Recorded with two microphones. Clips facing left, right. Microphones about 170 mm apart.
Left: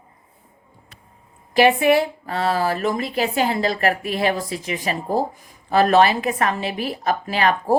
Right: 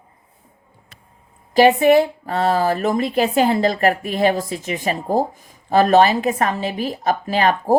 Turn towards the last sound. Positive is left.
turn(degrees=-40)  # may be behind; listen again after turning